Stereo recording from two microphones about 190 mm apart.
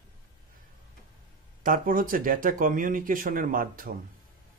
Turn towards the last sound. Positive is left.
turn(degrees=-50)  # may be behind; listen again after turning